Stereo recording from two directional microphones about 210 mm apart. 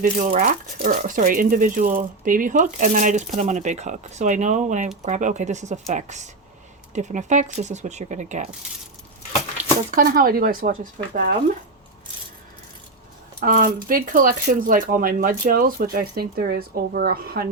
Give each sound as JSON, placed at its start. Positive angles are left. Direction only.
{"t": 0.0, "sound": "speech", "side_deg": -40}
{"t": 9.6, "sound": "a sound", "side_deg": -35}
{"t": 9.9, "sound": "speech", "side_deg": -45}
{"t": 13.4, "sound": "speech", "side_deg": -40}